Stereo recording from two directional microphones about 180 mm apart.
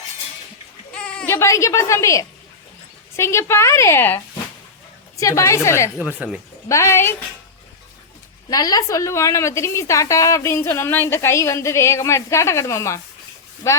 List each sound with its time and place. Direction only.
0.9 s a woman's voice: 5° left (ahead or behind)
5.2 s a woman's voice: 15° left (ahead or behind)
6.0 s speech: 10° right (ahead or behind)
6.7 s a woman's voice: 15° left (ahead or behind)
8.4 s a woman's voice: 20° left (ahead or behind)